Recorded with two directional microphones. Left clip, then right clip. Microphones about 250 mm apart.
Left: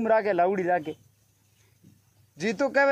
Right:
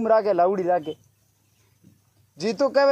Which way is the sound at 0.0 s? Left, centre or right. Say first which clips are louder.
Right 4 dB; left.